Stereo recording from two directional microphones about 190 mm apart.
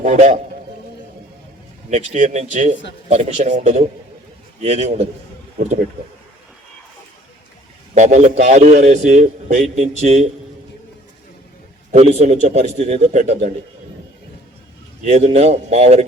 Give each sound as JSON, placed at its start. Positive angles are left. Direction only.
{"t": 0.0, "sound": "a man's voice", "side_deg": -35}
{"t": 1.9, "sound": "a man's voice", "side_deg": -40}
{"t": 7.9, "sound": "a man's voice", "side_deg": -40}
{"t": 11.9, "sound": "a man's voice", "side_deg": -35}
{"t": 15.0, "sound": "a man's voice", "side_deg": -35}